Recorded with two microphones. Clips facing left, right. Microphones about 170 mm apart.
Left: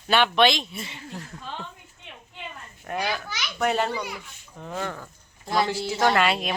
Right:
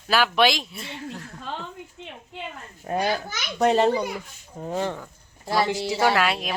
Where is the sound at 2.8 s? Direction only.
35° right (ahead or behind).